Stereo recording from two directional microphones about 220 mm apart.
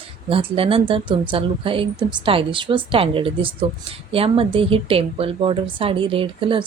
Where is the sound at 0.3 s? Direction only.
25° right (ahead or behind).